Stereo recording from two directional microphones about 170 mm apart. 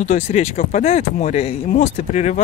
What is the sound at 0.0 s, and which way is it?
Speech, 40° left (ahead or behind).